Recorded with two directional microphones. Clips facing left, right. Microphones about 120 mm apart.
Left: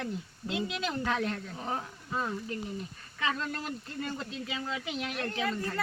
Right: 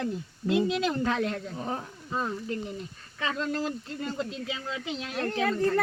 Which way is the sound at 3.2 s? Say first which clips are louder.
Right 4 dB; 30° right (ahead or behind).